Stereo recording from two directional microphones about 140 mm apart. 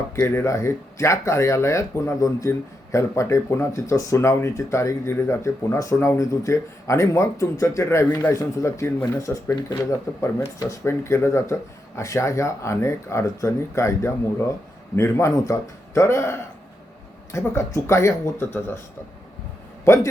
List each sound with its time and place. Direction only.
0.2 s speech: 20° left (ahead or behind)
19.8 s a man's voice: 20° left (ahead or behind)